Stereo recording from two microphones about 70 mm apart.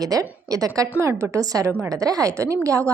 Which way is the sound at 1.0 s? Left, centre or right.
Right.